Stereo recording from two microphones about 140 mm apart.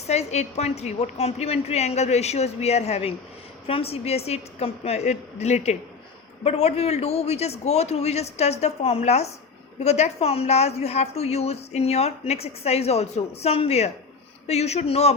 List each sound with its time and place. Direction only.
0.1 s a woman's voice: 50° left (ahead or behind)